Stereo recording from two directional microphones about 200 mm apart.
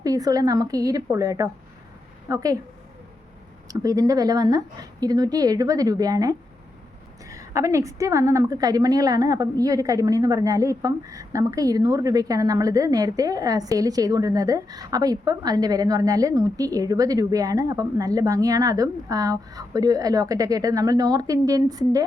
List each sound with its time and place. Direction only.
0.0 s a woman's voice: 20° right (ahead or behind)
3.7 s a woman's voice: 20° right (ahead or behind)